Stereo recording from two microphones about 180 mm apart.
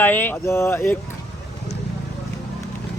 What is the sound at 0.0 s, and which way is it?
Speech, 10° left (ahead or behind).